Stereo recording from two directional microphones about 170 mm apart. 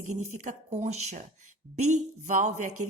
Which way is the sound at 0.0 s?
45° right (ahead or behind).